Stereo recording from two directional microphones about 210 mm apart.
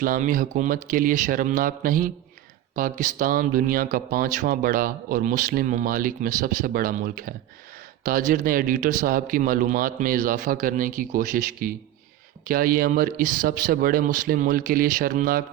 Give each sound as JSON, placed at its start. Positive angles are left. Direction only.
{"t": 0.0, "sound": "speech", "side_deg": -40}